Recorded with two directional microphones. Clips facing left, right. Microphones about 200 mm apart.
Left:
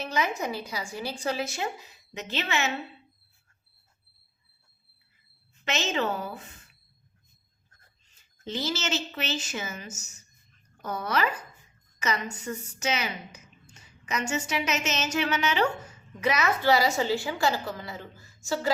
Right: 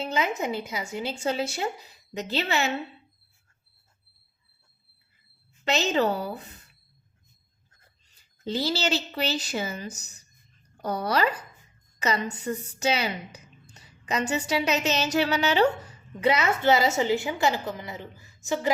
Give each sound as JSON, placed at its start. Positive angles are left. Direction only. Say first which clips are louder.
{"t": 0.0, "sound": "a woman's voice", "louder": "right 2 dB", "side_deg": -25}
{"t": 5.6, "sound": "a woman's voice", "louder": "right 5 dB", "side_deg": -35}
{"t": 8.4, "sound": "a woman's voice", "louder": "right 4 dB", "side_deg": -35}